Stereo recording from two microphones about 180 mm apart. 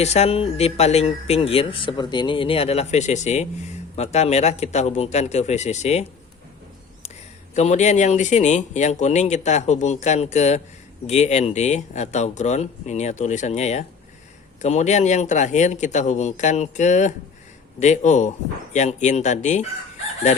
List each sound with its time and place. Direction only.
0.0 s speech: 35° left (ahead or behind)
7.5 s a man's voice: 40° left (ahead or behind)